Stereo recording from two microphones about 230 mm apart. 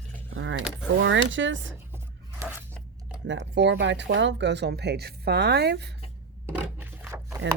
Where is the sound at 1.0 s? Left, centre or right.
Right.